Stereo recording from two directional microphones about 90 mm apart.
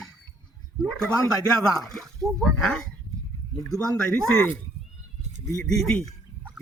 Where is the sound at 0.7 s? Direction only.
5° left (ahead or behind).